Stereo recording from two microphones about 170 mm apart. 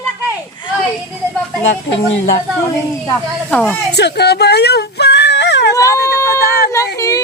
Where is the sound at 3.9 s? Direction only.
75° left (ahead or behind).